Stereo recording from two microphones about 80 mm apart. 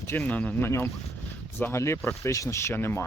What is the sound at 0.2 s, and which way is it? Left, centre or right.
Speech, centre.